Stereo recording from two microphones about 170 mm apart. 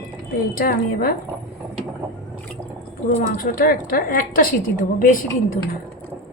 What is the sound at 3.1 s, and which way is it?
A woman's voice, 55° left (ahead or behind).